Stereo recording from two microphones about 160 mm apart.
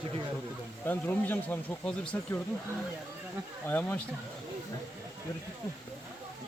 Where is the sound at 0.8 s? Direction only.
10° left (ahead or behind).